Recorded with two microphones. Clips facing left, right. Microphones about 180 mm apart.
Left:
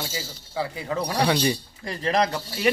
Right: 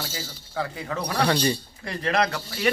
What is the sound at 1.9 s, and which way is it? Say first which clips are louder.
Speech: left 1 dB; 30° left (ahead or behind).